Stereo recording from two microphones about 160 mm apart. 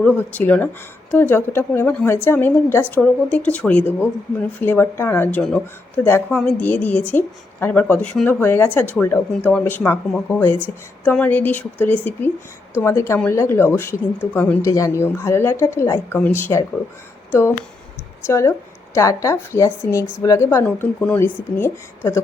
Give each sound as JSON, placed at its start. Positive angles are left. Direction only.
{"t": 0.0, "sound": "a woman's voice", "side_deg": 10}
{"t": 18.3, "sound": "a woman's voice", "side_deg": 15}